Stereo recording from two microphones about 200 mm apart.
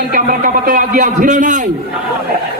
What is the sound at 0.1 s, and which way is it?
A man's voice, 40° right (ahead or behind).